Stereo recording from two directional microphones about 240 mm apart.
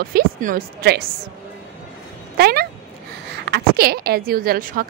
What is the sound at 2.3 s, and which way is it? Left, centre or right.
A woman's voice, right.